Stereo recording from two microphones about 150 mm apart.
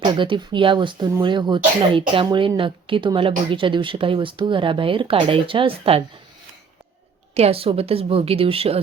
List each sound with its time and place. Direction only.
0.0 s speech: 30° right (ahead or behind)
7.3 s speech: 40° right (ahead or behind)